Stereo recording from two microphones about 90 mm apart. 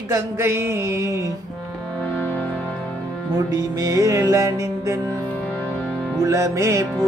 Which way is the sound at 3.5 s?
40° right (ahead or behind).